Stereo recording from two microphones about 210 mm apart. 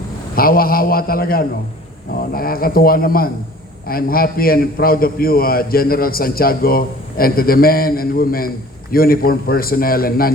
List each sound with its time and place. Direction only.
0.3 s a man's voice: 45° left (ahead or behind)